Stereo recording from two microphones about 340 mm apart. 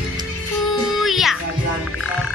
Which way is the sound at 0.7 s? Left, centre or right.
Centre.